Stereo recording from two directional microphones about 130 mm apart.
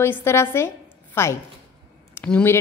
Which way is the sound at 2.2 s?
20° left (ahead or behind).